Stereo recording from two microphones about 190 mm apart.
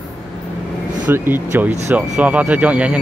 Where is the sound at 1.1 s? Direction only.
10° right (ahead or behind).